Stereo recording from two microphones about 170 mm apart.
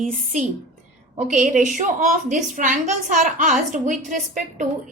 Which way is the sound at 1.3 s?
50° right (ahead or behind).